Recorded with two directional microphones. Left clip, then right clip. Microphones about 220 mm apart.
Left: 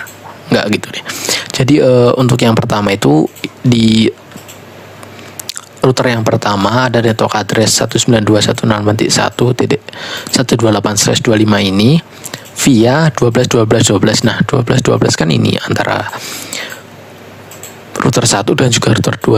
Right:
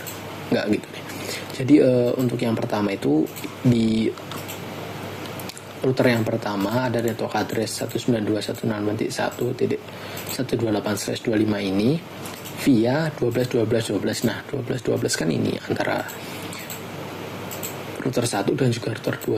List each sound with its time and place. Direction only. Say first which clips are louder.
0.5 s speech: left 10 dB; 45° left (ahead or behind)
5.5 s speech: left 13 dB; 50° left (ahead or behind)
18.0 s speech: left 12 dB; 50° left (ahead or behind)